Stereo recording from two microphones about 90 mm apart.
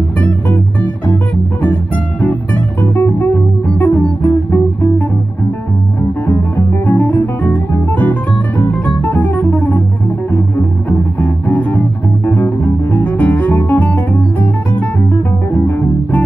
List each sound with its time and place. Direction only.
2.2 s guitar: 20° left (ahead or behind)
3.8 s music: 15° left (ahead or behind)
6.9 s music: 15° left (ahead or behind)
10.9 s music: 15° left (ahead or behind)